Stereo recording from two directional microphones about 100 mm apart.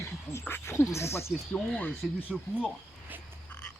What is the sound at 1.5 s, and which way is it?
Speech, 5° left (ahead or behind).